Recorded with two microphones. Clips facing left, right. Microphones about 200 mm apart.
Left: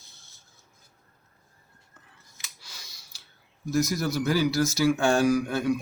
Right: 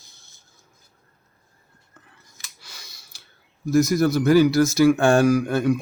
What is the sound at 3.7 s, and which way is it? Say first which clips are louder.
Speech: right 8 dB; 55° right (ahead or behind).